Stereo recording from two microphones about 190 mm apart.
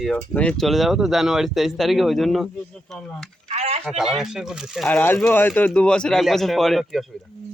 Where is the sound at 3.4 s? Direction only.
35° right (ahead or behind).